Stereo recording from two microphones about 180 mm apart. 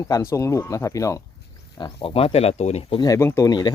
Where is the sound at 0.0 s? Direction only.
15° left (ahead or behind).